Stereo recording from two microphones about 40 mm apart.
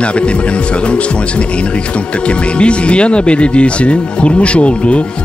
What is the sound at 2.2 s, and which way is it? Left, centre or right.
Speech, left.